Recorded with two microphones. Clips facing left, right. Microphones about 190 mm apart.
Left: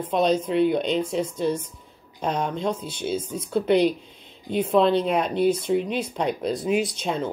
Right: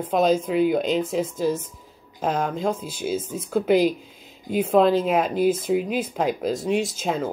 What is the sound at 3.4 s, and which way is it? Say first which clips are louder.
Speech: right 1 dB; 45° right (ahead or behind).